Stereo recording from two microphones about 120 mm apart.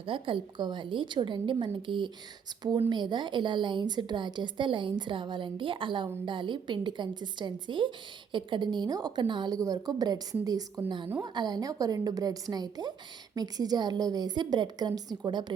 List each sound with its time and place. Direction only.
0.0 s a woman's voice: 45° right (ahead or behind)